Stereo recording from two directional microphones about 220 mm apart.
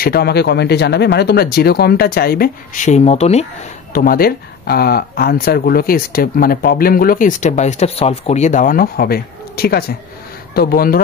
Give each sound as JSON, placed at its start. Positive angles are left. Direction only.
{"t": 0.0, "sound": "speech", "side_deg": 45}
{"t": 3.9, "sound": "speech", "side_deg": 40}